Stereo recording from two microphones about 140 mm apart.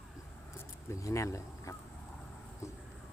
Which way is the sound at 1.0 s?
20° left (ahead or behind).